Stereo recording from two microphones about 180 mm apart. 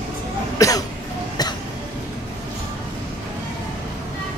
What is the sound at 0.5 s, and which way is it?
Cough, 20° left (ahead or behind).